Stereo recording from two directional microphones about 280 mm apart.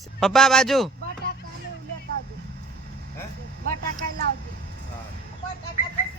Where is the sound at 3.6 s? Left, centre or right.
Right.